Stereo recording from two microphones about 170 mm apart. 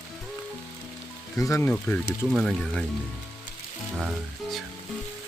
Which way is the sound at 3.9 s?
Centre (ahead or behind).